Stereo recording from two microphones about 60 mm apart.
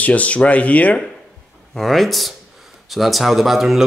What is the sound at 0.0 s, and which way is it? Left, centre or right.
Speech, left.